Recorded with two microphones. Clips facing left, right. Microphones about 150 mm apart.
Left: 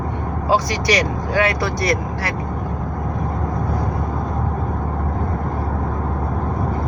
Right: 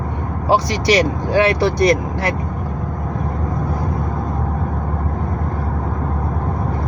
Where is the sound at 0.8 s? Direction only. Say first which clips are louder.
Right 4 dB; 30° right (ahead or behind).